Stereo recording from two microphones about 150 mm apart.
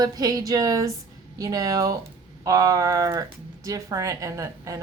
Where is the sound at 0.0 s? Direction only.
25° right (ahead or behind).